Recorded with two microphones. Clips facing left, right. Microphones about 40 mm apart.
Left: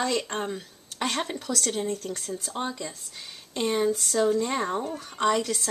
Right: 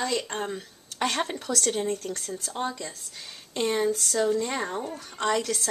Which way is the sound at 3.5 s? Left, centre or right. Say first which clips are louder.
Even; centre.